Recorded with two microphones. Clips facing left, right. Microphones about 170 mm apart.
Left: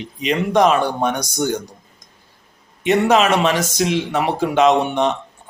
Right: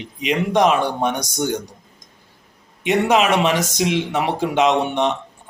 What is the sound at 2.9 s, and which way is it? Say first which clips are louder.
Speech: left 2 dB; 15° right (ahead or behind).